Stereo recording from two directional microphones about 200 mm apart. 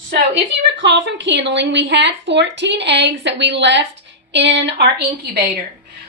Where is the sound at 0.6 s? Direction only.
60° right (ahead or behind).